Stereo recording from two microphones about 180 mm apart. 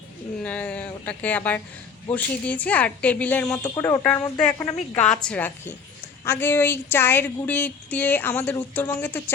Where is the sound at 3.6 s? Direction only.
20° left (ahead or behind).